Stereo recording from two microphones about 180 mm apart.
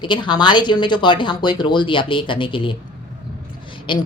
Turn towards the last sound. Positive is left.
turn(degrees=25)  # may be behind; listen again after turning